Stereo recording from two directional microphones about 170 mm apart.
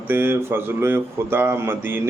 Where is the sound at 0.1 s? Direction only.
10° right (ahead or behind).